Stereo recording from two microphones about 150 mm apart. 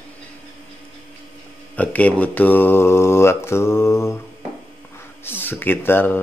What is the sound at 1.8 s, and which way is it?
Mantra, 10° left (ahead or behind).